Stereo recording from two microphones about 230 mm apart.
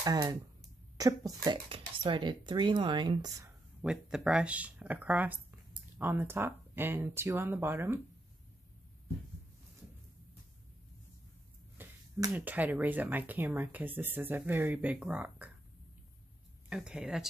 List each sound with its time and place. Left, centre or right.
0.0 s speech: centre
3.8 s speech: centre
11.8 s finger snapping: centre
12.3 s speech: centre
16.6 s speech: centre